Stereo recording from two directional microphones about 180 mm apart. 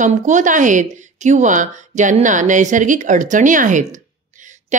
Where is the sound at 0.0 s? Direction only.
45° right (ahead or behind).